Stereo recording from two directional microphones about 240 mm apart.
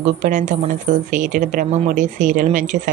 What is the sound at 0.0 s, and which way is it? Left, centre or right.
Speech, right.